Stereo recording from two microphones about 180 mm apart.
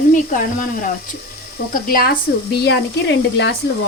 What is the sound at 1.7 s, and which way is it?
Speech, 55° left (ahead or behind).